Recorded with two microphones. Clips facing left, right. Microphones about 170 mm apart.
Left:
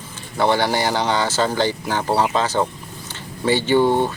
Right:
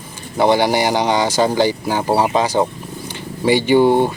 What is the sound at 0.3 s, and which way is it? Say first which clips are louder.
Speech: right 4 dB; 15° right (ahead or behind).